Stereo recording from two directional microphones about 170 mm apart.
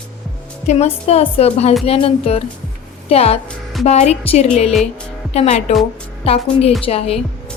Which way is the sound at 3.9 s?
40° left (ahead or behind).